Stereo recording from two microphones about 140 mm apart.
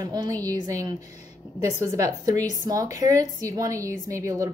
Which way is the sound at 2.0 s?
25° right (ahead or behind).